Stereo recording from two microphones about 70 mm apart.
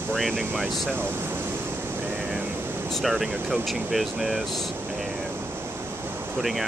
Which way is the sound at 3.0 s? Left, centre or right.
Centre.